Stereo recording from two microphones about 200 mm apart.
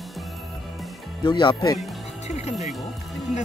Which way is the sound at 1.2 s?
25° left (ahead or behind).